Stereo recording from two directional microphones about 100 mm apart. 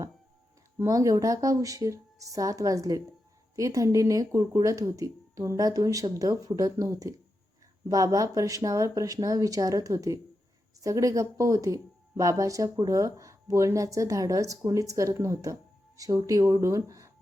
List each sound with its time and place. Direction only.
0.8 s speech: 35° right (ahead or behind)